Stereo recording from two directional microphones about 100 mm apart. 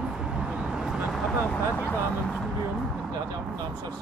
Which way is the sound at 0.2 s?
5° right (ahead or behind).